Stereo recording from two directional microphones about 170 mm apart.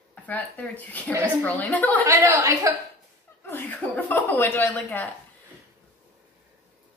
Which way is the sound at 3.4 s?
10° left (ahead or behind).